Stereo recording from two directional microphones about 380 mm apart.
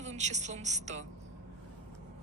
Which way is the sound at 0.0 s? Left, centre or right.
Centre.